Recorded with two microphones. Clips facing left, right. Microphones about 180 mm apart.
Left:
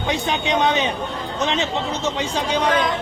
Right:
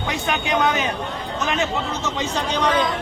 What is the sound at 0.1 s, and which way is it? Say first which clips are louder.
Speech: left 2 dB; 25° left (ahead or behind).